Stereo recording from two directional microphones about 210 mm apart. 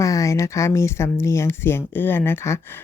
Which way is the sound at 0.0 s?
15° left (ahead or behind).